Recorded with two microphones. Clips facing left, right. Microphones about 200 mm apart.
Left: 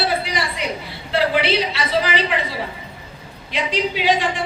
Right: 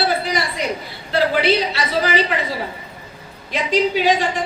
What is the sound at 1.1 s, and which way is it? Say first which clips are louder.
A woman's voice: right 2 dB; 40° right (ahead or behind).